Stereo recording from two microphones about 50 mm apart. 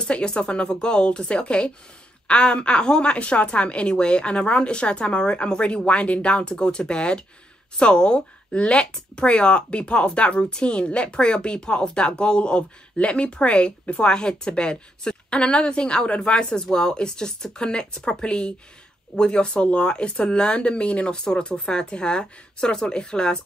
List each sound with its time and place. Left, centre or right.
0.0 s speech: centre